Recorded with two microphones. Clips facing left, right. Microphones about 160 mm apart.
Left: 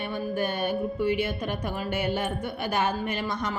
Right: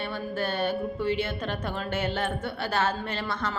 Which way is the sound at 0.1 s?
15° left (ahead or behind).